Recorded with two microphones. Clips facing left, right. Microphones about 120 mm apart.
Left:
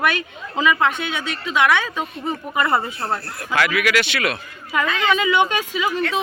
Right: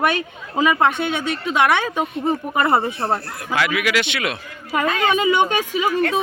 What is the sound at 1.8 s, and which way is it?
Speech, 25° right (ahead or behind).